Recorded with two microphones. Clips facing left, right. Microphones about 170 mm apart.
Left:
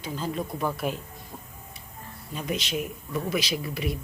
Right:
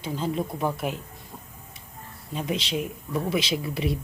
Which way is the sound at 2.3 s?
25° right (ahead or behind).